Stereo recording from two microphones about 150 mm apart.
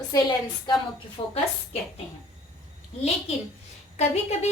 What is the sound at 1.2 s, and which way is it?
Speech, 40° left (ahead or behind).